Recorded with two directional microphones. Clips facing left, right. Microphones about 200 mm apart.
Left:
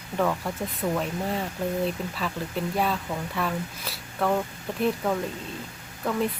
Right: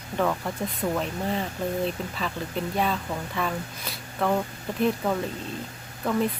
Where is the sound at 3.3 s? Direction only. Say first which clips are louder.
Even; centre (ahead or behind).